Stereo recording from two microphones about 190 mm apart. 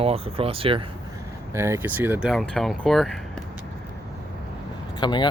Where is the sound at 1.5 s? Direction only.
15° right (ahead or behind).